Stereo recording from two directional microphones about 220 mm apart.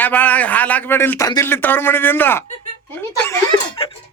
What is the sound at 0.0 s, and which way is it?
A man's voice, 5° left (ahead or behind).